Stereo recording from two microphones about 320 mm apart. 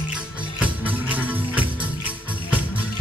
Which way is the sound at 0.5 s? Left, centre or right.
Centre.